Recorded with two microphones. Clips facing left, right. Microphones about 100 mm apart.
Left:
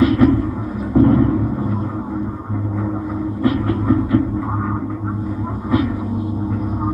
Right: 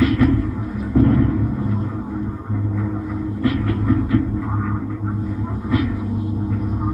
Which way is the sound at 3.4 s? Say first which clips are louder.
Left 3 dB; 25° left (ahead or behind).